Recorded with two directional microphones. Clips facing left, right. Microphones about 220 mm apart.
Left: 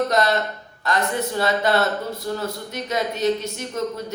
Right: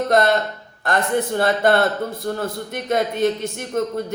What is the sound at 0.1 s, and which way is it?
Speech, 50° right (ahead or behind).